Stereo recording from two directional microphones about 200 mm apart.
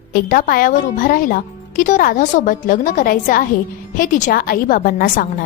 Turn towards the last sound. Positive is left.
turn(degrees=45)  # may be behind; listen again after turning